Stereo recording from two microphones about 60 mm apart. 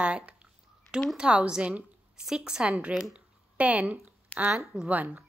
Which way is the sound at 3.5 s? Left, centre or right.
Right.